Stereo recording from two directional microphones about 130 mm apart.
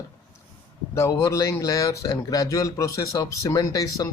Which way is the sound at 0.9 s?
25° left (ahead or behind).